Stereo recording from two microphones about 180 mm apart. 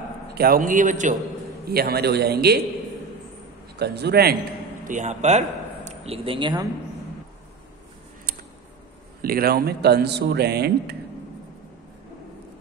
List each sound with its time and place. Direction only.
0.3 s a man's voice: 55° right (ahead or behind)
1.7 s speech: 60° right (ahead or behind)
3.8 s speech: 65° right (ahead or behind)
4.8 s a man's voice: 40° right (ahead or behind); by 6.7 s 25° right (ahead or behind)
9.2 s speech: 55° right (ahead or behind)